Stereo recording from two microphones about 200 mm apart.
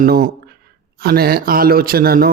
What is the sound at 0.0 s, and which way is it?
A man's voice, 45° right (ahead or behind).